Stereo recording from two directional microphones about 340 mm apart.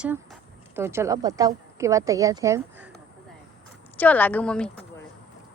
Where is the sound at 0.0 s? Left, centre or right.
Centre.